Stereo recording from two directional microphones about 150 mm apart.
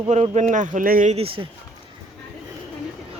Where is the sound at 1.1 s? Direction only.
40° right (ahead or behind).